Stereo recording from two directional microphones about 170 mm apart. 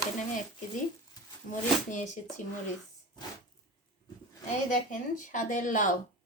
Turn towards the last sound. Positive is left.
turn(degrees=45)  # may be behind; listen again after turning